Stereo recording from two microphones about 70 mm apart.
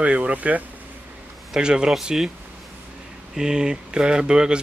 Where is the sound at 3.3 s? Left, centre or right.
Centre.